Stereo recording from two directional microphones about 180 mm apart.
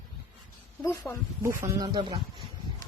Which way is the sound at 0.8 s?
15° left (ahead or behind).